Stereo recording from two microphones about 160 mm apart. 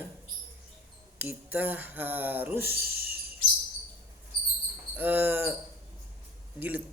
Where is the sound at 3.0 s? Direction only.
70° right (ahead or behind).